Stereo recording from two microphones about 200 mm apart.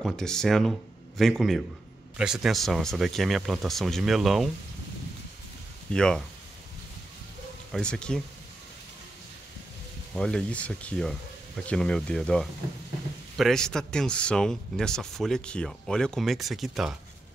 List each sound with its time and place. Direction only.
0.0 s speech: 5° left (ahead or behind)
5.9 s speech: 5° left (ahead or behind)
7.7 s speech: 5° left (ahead or behind)
10.1 s speech: 5° left (ahead or behind)